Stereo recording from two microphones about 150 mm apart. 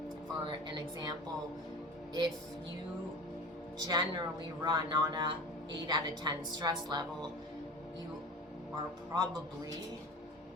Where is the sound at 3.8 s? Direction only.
30° right (ahead or behind).